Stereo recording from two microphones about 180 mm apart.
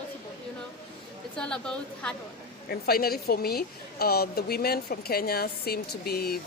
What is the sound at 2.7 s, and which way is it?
A woman's voice, 60° left (ahead or behind).